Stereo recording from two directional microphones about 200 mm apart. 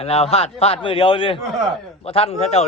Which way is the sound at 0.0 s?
30° left (ahead or behind).